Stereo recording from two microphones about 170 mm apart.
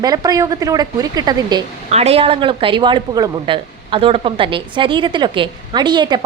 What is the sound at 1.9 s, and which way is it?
A woman's voice, 40° right (ahead or behind).